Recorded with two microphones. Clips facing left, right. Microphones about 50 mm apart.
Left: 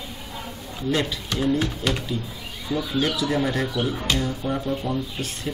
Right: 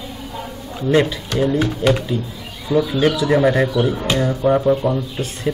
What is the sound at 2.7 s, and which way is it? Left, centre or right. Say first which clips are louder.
Speech: right 8 dB; right.